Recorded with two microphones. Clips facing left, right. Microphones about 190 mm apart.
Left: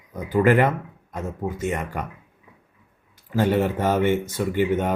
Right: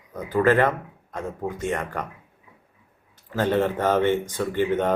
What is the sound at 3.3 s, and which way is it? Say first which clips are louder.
Speech: left 1 dB; 10° left (ahead or behind).